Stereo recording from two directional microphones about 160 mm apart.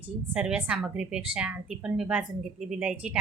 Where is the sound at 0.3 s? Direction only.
5° right (ahead or behind).